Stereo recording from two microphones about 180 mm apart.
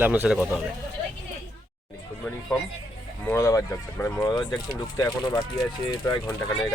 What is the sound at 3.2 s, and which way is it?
Speech, 15° left (ahead or behind).